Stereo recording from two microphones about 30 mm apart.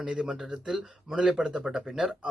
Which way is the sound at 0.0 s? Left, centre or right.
Right.